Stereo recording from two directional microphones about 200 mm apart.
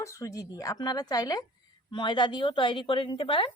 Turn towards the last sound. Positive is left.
turn(degrees=25)  # may be behind; listen again after turning